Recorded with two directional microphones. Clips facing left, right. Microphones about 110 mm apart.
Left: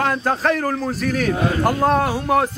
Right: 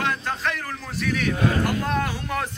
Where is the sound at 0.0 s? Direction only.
40° left (ahead or behind).